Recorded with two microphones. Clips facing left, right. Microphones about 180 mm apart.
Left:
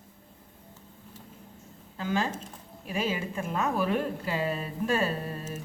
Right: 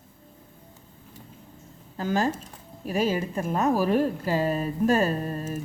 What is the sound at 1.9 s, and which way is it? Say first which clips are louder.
A woman's voice: right 4 dB; 40° right (ahead or behind).